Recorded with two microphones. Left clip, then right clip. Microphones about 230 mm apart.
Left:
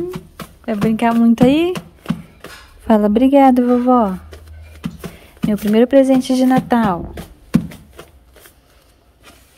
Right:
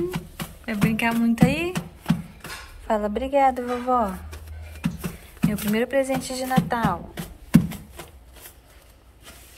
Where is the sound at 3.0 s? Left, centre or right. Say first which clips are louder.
Left 9 dB; left.